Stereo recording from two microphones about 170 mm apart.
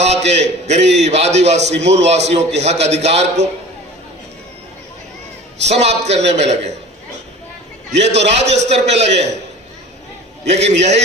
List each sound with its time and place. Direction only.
0.0 s a man's voice: 40° right (ahead or behind)
5.6 s a man's voice: 40° right (ahead or behind)
8.0 s a man's voice: 40° right (ahead or behind)
10.4 s a man's voice: 40° right (ahead or behind)